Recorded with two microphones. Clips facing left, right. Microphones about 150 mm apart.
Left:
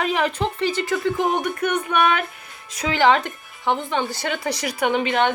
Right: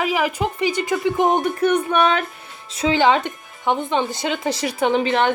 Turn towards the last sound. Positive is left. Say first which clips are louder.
# right 2 dB
turn(degrees=-35)  # may be behind; listen again after turning